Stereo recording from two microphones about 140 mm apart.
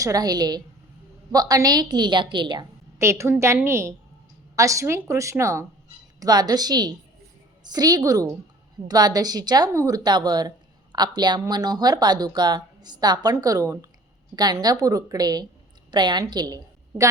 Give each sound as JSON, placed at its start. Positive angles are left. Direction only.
{"t": 0.0, "sound": "speech", "side_deg": -25}
{"t": 3.0, "sound": "a woman's voice", "side_deg": -20}